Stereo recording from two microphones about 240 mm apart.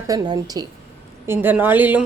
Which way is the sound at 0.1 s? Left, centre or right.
Centre.